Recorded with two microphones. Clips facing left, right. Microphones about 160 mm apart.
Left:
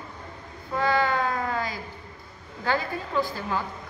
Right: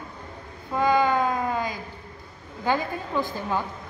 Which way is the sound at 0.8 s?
15° right (ahead or behind).